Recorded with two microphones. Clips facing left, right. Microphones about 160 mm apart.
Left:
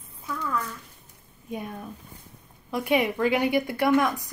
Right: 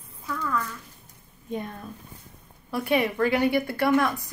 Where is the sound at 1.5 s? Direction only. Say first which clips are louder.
Right 1 dB; 10° left (ahead or behind).